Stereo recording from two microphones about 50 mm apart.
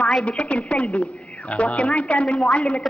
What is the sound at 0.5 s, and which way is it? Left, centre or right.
A woman's voice, left.